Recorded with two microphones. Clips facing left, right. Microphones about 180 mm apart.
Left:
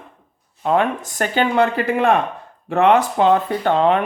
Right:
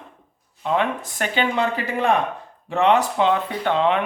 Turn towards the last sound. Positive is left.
turn(degrees=45)  # may be behind; listen again after turning